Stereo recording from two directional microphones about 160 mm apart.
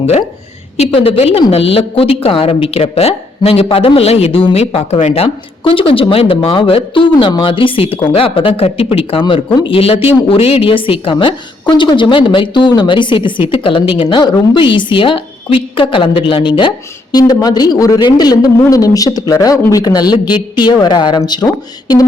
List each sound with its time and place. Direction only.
0.8 s a woman's voice: 35° left (ahead or behind)